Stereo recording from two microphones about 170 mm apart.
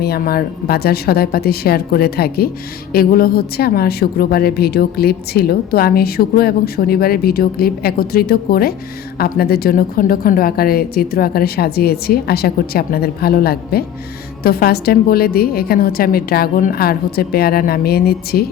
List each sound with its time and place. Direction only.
0.0 s a woman's voice: 65° left (ahead or behind)